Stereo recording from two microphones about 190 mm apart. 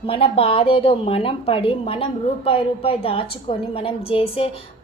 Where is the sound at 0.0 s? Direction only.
30° left (ahead or behind).